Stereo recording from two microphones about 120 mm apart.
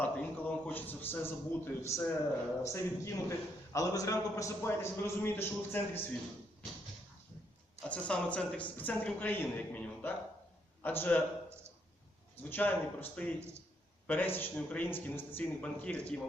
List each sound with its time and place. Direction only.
0.0 s a woman's voice: 10° left (ahead or behind)
7.8 s a woman's voice: 10° left (ahead or behind)
12.4 s a woman's voice: 15° left (ahead or behind)